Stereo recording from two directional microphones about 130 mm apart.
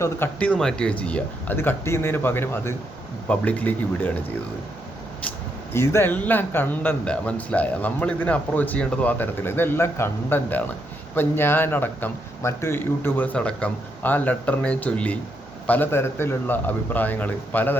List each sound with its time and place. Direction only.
0.0 s speech: 15° left (ahead or behind)
5.7 s speech: 20° left (ahead or behind)